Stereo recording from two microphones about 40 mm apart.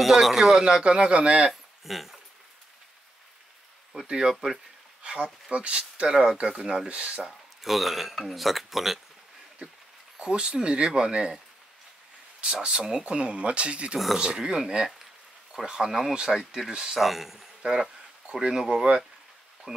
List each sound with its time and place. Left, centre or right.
0.0 s speech: centre; by 1.5 s right
1.5 s speech: centre
4.1 s speech: centre
6.9 s speech: right
7.2 s speech: centre
10.1 s speech: right
12.6 s speech: centre
14.1 s speech: centre
15.9 s speech: centre
17.0 s speech: centre
18.5 s speech: centre